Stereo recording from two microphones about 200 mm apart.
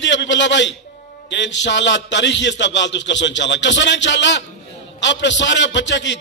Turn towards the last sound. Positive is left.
turn(degrees=65)  # may be behind; listen again after turning